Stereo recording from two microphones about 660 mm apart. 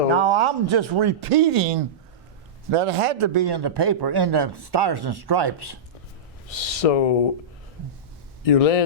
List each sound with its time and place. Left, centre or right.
0.1 s a man's voice: right
6.5 s speech: left
8.4 s speech: left